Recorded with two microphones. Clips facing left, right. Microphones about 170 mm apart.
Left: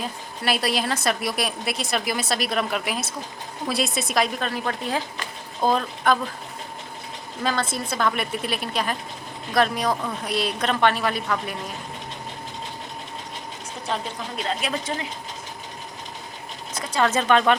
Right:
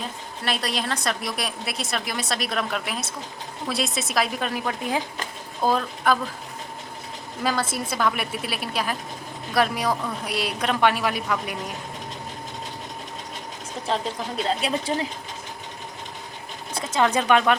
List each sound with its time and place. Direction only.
0.4 s a woman's voice: 5° left (ahead or behind); by 5.0 s 15° right (ahead or behind)
5.6 s a woman's voice: 5° right (ahead or behind)
7.4 s a woman's voice: 5° right (ahead or behind)
13.9 s a woman's voice: 30° right (ahead or behind)
16.7 s speech: 20° right (ahead or behind)